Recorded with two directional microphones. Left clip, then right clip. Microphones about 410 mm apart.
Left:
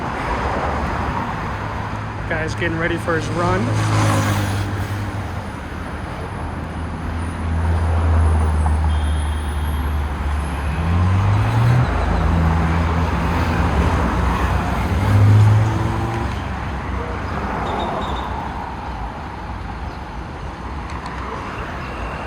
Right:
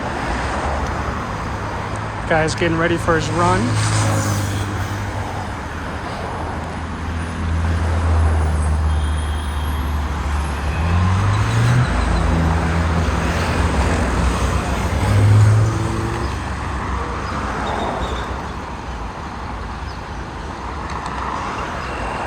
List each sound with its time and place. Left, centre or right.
2.3 s speech: centre
3.8 s vehicle: centre